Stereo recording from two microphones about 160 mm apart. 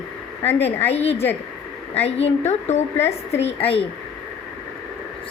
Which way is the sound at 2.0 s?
40° left (ahead or behind).